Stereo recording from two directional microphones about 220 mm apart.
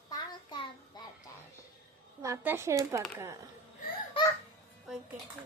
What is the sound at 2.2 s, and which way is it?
Speech, 10° right (ahead or behind).